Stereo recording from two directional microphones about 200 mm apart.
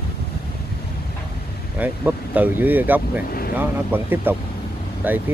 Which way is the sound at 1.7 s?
10° right (ahead or behind).